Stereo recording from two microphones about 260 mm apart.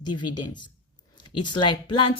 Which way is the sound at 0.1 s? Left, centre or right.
Left.